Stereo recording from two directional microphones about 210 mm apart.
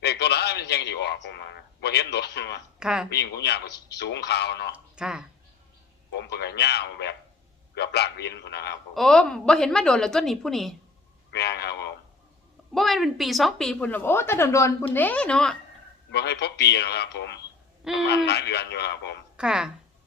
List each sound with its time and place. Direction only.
0.0 s a sound: 50° left (ahead or behind)
1.8 s a man's voice: 50° left (ahead or behind)
2.7 s speech: 5° right (ahead or behind)
3.1 s a man's voice: 50° left (ahead or behind)
4.7 s speech: 5° right (ahead or behind)
6.1 s a man's voice: 55° left (ahead or behind)
9.0 s a woman's voice: 5° left (ahead or behind)
11.3 s a man's voice: 50° left (ahead or behind)
12.7 s a woman's voice: centre (ahead or behind)
16.1 s a man's voice: 55° left (ahead or behind)
19.4 s a woman's voice: 5° right (ahead or behind)